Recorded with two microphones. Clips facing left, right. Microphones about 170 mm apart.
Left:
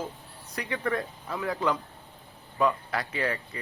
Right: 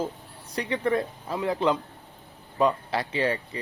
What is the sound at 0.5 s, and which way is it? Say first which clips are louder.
Speech: right 5 dB; 25° right (ahead or behind).